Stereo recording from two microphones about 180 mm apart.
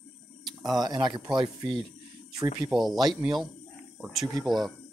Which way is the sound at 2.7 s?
Centre (ahead or behind).